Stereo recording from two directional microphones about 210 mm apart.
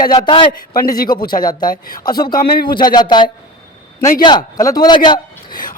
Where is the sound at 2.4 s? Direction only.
45° left (ahead or behind).